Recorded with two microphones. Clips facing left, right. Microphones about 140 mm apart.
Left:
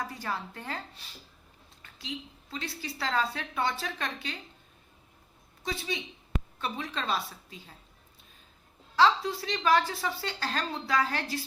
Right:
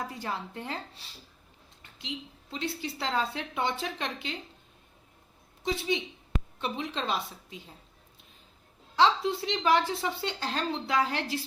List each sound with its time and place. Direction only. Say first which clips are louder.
0.1 s a woman's voice: even; 20° right (ahead or behind)
5.6 s a woman's voice: right 5 dB; 25° right (ahead or behind)
9.0 s a woman's voice: even; 25° right (ahead or behind)